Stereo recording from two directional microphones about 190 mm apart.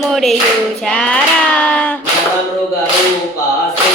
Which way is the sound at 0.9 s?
5° left (ahead or behind).